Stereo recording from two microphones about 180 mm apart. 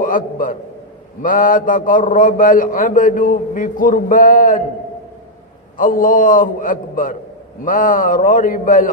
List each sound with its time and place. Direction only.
0.0 s a man's voice: 50° left (ahead or behind)
5.8 s a man's voice: 50° left (ahead or behind)